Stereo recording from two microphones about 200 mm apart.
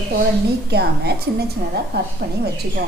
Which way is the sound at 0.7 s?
55° right (ahead or behind).